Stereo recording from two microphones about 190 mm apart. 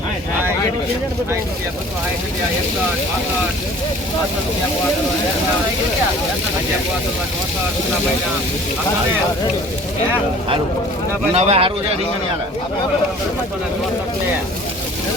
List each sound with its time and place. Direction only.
11.3 s speech: 35° right (ahead or behind)